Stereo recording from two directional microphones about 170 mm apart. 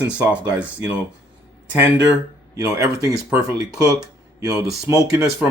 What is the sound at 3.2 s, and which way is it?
Speech, 5° right (ahead or behind).